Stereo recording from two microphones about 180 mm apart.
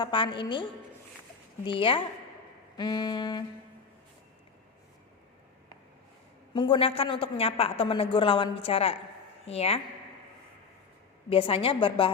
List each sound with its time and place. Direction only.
0.0 s a woman's voice: 25° left (ahead or behind)
1.6 s a woman's voice: 30° left (ahead or behind)
6.5 s a woman's voice: 25° left (ahead or behind)
11.3 s a woman's voice: 30° left (ahead or behind)